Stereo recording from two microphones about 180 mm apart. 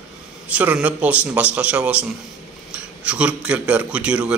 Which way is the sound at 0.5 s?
5° right (ahead or behind).